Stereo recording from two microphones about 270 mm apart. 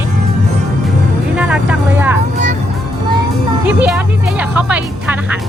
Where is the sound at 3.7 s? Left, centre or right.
Centre.